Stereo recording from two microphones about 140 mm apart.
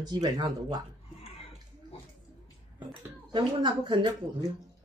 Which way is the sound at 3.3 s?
35° right (ahead or behind).